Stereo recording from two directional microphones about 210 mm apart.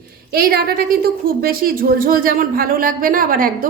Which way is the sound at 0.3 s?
45° right (ahead or behind).